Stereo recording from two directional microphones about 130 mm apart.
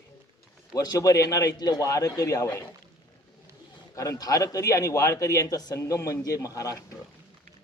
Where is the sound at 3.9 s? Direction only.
25° left (ahead or behind).